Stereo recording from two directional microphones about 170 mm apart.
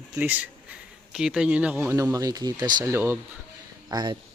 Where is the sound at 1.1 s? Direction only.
5° right (ahead or behind); by 4.2 s 25° right (ahead or behind).